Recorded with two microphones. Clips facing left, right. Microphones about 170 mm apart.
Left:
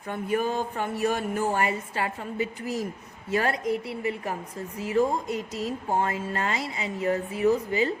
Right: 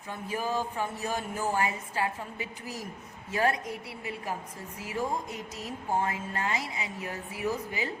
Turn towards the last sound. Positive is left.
turn(degrees=60)  # may be behind; listen again after turning